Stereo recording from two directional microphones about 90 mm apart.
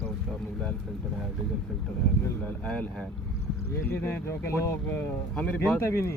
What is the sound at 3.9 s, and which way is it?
Speech, 25° left (ahead or behind).